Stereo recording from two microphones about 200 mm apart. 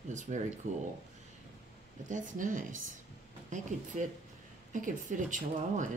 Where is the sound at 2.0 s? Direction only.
40° right (ahead or behind).